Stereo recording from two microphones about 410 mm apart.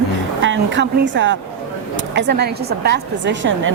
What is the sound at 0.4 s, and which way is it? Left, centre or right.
A woman's voice, right.